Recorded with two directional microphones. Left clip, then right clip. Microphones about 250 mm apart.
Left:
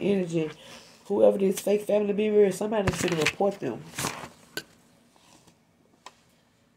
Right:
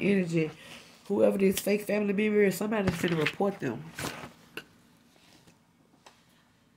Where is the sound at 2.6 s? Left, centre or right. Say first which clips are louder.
Left 3 dB; right.